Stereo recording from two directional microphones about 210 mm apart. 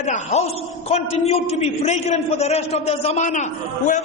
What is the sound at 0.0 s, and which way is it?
A man's voice, 35° left (ahead or behind).